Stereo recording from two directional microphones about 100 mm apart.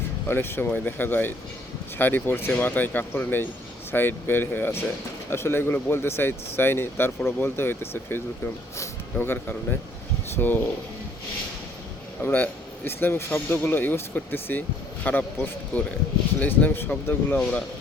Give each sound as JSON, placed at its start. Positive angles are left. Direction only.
{"t": 0.3, "sound": "speech", "side_deg": 20}
{"t": 12.2, "sound": "speech", "side_deg": 20}